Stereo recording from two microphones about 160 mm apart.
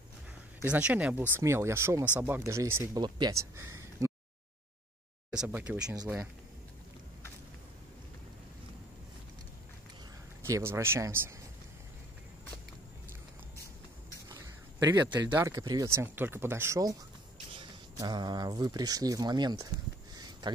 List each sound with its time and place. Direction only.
0.7 s speech: 5° right (ahead or behind)
5.3 s speech: 5° right (ahead or behind)
10.4 s speech: 15° right (ahead or behind)
14.3 s a sound: 20° right (ahead or behind)
15.3 s speech: 20° right (ahead or behind)
17.9 s speech: 25° right (ahead or behind)
20.2 s a sound: 25° right (ahead or behind)